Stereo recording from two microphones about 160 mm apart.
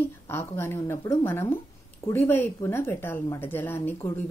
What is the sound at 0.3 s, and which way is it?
A woman's voice, 15° left (ahead or behind).